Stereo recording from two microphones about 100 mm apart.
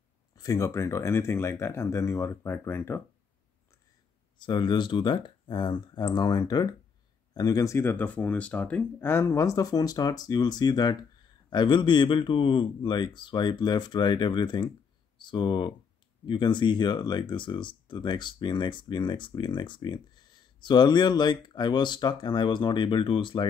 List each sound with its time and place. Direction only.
0.4 s speech: 35° left (ahead or behind)
4.4 s speech: 50° left (ahead or behind)